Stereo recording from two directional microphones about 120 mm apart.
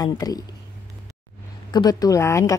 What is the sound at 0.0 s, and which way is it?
Speech, 30° left (ahead or behind).